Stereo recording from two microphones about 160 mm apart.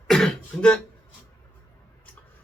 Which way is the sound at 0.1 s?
5° left (ahead or behind).